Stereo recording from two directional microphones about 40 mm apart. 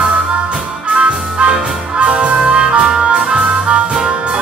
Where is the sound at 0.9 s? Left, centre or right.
Right.